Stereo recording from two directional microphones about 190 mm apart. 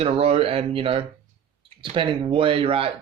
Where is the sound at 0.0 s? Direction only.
30° right (ahead or behind).